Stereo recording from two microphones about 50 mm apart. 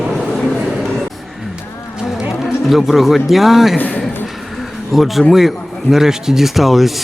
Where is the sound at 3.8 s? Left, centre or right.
Left.